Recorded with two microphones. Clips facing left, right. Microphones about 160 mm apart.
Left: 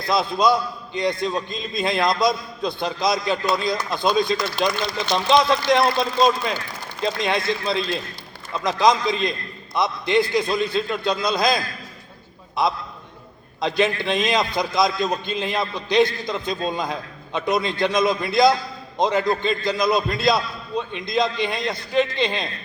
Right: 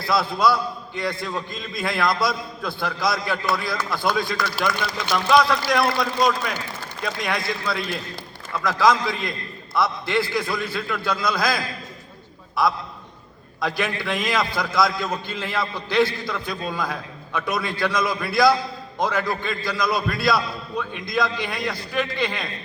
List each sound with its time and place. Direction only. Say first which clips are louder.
0.0 s a man's voice: left 1 dB; 20° left (ahead or behind)